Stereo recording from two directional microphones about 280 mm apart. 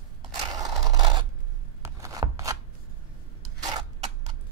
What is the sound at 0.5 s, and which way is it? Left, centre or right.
Scrape, centre.